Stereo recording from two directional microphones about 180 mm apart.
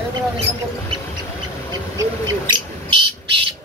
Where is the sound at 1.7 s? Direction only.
25° right (ahead or behind).